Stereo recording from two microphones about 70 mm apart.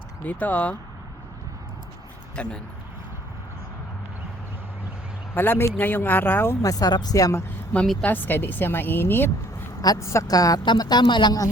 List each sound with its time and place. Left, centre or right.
0.3 s speech: left
2.3 s speech: centre
5.3 s speech: left
6.6 s speech: left
8.0 s a woman's voice: left
10.0 s a woman's voice: left
10.2 s speech: left